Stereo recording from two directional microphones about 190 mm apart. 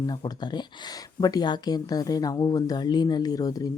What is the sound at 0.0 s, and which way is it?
A woman's voice, 20° left (ahead or behind).